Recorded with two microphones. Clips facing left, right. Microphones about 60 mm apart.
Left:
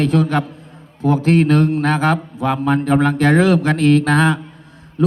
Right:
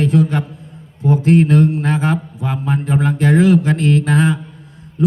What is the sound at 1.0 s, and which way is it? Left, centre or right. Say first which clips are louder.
Mantra: right 1 dB; left.